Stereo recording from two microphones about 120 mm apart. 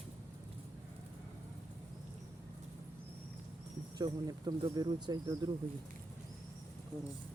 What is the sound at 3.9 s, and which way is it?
Speech, 35° right (ahead or behind).